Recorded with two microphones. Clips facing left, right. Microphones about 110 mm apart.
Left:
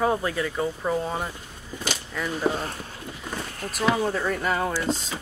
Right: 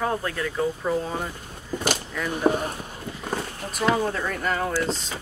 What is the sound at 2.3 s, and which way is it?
Speech, 15° right (ahead or behind).